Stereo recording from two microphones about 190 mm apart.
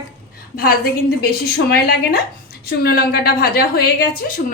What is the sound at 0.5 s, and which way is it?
A woman's voice, 50° left (ahead or behind).